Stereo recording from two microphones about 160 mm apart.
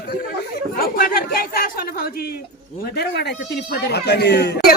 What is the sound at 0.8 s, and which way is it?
Chatter, 65° left (ahead or behind).